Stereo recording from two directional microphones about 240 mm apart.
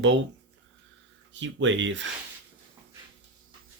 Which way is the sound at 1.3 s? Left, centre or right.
Right.